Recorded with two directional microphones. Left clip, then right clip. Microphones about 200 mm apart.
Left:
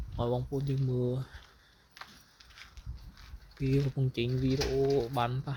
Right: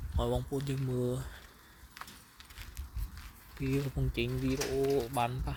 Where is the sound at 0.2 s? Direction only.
10° right (ahead or behind).